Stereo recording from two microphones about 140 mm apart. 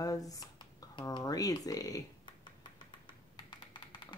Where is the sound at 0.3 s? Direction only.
25° left (ahead or behind).